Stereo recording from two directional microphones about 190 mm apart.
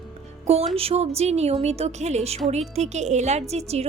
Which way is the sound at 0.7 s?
30° right (ahead or behind).